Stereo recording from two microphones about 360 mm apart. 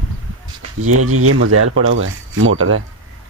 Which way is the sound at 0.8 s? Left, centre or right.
Right.